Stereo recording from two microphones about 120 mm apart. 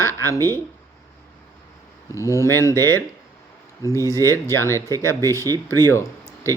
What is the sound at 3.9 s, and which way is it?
Speech, 25° right (ahead or behind).